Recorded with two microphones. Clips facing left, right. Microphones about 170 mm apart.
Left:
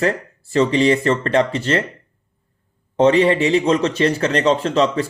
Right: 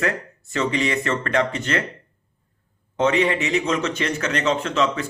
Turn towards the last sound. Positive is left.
turn(degrees=35)  # may be behind; listen again after turning